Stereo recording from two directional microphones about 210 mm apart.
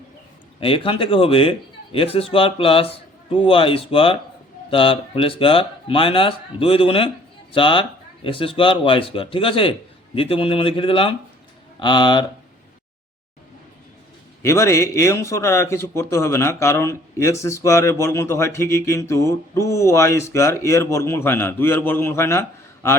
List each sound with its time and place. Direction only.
0.6 s speech: 25° left (ahead or behind)
14.4 s speech: 15° left (ahead or behind)